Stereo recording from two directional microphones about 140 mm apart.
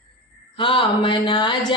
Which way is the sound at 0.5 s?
40° left (ahead or behind).